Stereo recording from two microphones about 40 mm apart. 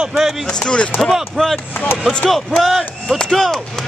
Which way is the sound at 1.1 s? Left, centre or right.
Centre.